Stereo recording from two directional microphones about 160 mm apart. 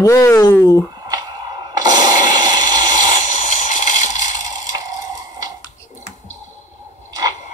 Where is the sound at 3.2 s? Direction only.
50° left (ahead or behind).